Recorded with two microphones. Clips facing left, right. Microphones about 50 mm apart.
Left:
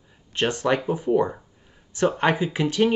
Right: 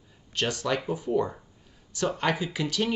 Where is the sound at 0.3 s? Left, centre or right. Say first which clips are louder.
Left 5 dB; left.